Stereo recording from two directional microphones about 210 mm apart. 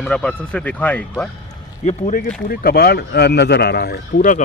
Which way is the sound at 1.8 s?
35° left (ahead or behind).